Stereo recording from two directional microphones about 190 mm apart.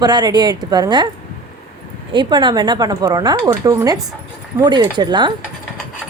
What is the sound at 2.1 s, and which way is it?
A woman's voice, 25° right (ahead or behind).